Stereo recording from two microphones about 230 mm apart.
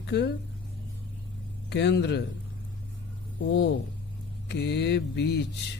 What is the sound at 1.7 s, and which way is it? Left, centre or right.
Speech, left.